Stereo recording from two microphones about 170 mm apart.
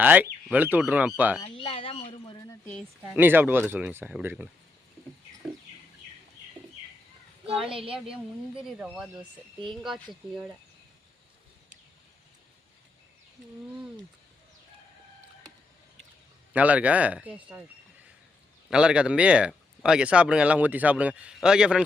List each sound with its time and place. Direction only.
0.0 s speech: 10° right (ahead or behind)
1.4 s a sound: 30° left (ahead or behind)
2.6 s speech: 5° left (ahead or behind)
3.2 s speech: 10° right (ahead or behind)
7.4 s a woman's voice: 35° right (ahead or behind)
8.1 s speech: 5° right (ahead or behind)
16.5 s speech: 10° right (ahead or behind)
18.7 s speech: 5° right (ahead or behind)